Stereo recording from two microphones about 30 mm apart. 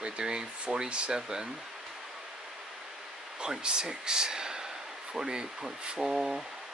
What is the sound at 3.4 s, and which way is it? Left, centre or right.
Speech, right.